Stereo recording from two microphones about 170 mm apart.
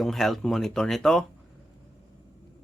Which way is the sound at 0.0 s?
Centre (ahead or behind).